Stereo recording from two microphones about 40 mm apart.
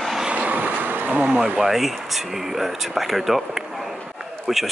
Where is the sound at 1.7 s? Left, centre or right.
Centre.